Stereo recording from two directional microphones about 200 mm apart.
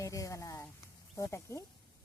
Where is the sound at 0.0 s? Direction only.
15° left (ahead or behind).